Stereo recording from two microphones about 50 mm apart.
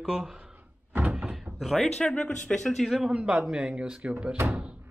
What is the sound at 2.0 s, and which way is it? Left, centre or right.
Speech, centre.